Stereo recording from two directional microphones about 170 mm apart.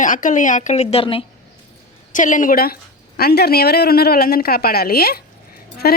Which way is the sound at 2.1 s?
50° left (ahead or behind).